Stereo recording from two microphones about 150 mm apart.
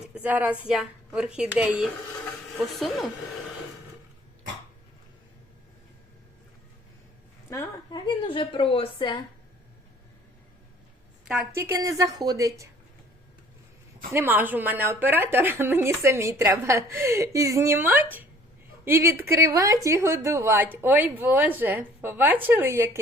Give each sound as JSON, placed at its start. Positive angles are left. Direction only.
{"t": 0.1, "sound": "a woman's voice", "side_deg": -10}
{"t": 7.5, "sound": "a sound", "side_deg": 30}
{"t": 11.5, "sound": "speech", "side_deg": -20}
{"t": 14.1, "sound": "a woman's voice", "side_deg": -15}